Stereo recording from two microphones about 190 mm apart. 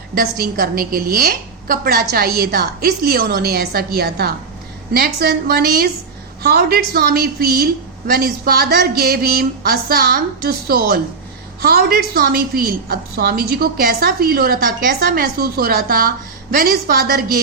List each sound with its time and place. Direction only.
0.1 s a woman's voice: 55° right (ahead or behind)